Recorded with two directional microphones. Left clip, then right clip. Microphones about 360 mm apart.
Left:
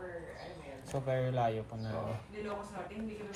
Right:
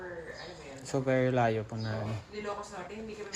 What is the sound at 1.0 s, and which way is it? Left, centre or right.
Speech, right.